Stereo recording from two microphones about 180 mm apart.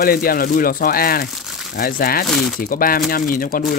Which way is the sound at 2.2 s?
Centre (ahead or behind).